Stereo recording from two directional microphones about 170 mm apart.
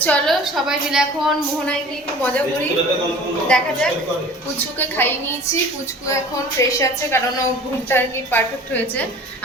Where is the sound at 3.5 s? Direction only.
5° left (ahead or behind).